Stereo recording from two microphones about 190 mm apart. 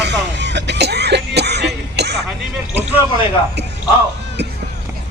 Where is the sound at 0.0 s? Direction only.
65° right (ahead or behind).